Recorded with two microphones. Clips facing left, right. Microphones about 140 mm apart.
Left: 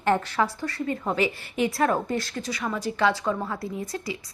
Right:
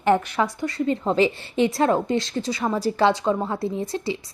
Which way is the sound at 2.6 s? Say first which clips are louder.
Right 4 dB; 35° right (ahead or behind).